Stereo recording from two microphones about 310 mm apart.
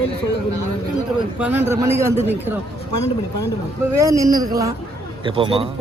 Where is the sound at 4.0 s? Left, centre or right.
Centre.